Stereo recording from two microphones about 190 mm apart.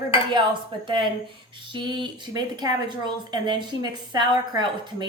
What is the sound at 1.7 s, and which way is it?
A woman's voice, 25° right (ahead or behind).